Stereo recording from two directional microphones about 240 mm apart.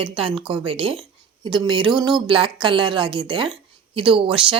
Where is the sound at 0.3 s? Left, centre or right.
Right.